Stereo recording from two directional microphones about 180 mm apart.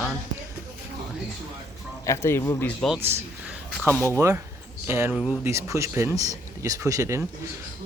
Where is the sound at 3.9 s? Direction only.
15° left (ahead or behind).